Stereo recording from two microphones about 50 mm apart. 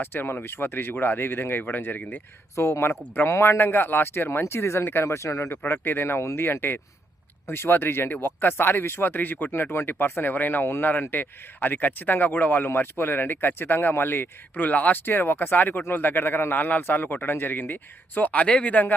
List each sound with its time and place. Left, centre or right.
0.0 s speech: left
2.6 s speech: left
3.2 s speech: left
3.6 s speech: left
5.0 s speech: left
5.6 s speech: left
9.5 s speech: left
14.5 s speech: left